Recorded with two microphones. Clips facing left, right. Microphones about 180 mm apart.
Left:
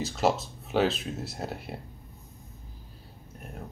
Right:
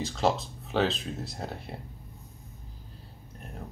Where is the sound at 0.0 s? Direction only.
5° left (ahead or behind).